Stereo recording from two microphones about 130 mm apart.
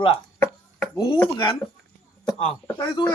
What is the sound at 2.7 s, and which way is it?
Speech, 30° left (ahead or behind).